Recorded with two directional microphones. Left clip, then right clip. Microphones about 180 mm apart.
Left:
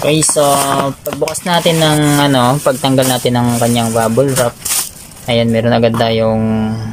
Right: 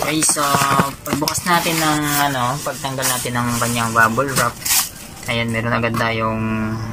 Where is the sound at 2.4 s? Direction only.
60° left (ahead or behind).